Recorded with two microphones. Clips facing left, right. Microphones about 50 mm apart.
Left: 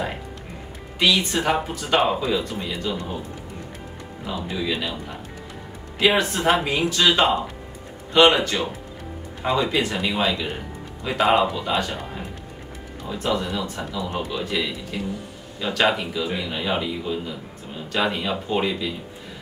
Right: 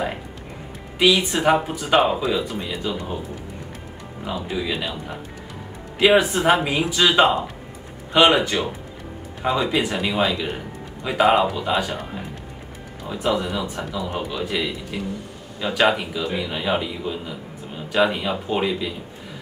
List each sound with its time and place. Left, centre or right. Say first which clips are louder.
0.9 s a man's voice: right 2 dB; centre
4.2 s a man's voice: right 1 dB; centre
5.9 s a man's voice: right 4 dB; centre
13.1 s a man's voice: right 2 dB; centre